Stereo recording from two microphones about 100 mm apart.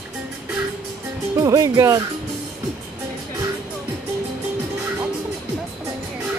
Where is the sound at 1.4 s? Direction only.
35° right (ahead or behind).